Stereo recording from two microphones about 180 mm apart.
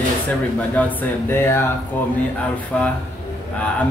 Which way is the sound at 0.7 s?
10° left (ahead or behind).